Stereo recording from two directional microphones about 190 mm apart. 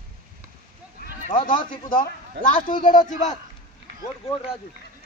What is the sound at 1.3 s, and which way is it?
A man's voice, 45° left (ahead or behind).